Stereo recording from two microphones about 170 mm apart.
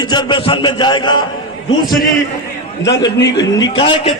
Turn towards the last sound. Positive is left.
turn(degrees=30)  # may be behind; listen again after turning